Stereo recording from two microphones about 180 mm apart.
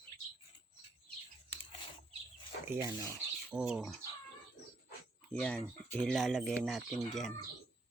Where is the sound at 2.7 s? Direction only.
20° right (ahead or behind).